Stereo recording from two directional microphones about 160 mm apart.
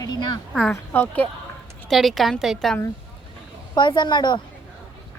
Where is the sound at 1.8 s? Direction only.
Centre (ahead or behind).